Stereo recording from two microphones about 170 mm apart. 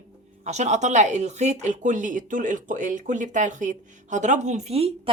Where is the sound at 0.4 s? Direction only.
45° right (ahead or behind).